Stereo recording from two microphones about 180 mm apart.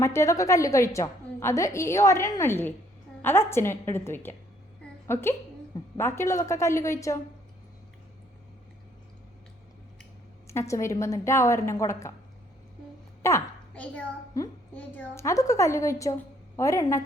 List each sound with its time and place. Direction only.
0.0 s a woman's voice: 15° left (ahead or behind)
4.8 s a sound: 15° left (ahead or behind)
5.7 s a woman's voice: 15° left (ahead or behind)
10.4 s a woman's voice: 15° left (ahead or behind)
13.2 s a woman's voice: 10° left (ahead or behind)